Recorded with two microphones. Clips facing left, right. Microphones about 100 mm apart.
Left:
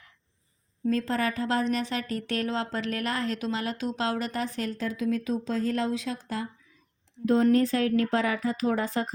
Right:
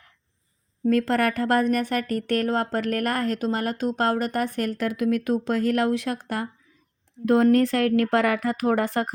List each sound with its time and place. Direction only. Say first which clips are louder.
0.9 s a woman's voice: right 6 dB; 65° right (ahead or behind)